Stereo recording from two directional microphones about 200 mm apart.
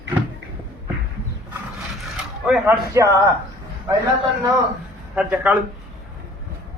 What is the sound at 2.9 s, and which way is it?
Speech, 15° right (ahead or behind).